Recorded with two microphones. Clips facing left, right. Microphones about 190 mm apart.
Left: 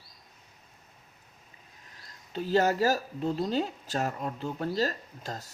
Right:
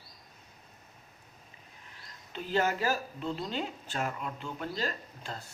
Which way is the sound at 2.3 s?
40° left (ahead or behind).